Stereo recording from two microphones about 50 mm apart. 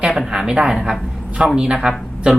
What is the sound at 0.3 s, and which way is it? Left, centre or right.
Speech, centre.